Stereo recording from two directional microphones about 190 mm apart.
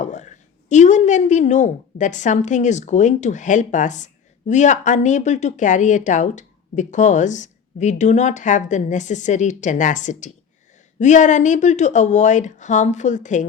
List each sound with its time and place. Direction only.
0.0 s speech: 40° left (ahead or behind)